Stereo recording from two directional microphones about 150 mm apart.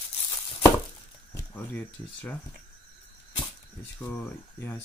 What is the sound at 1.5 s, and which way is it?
Speech, 10° left (ahead or behind).